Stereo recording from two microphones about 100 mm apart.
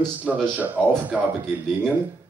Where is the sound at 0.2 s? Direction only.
15° right (ahead or behind).